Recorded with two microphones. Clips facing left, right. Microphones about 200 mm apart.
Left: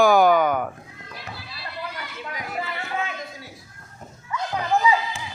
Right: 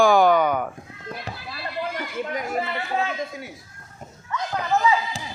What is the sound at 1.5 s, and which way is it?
Chatter, 50° right (ahead or behind).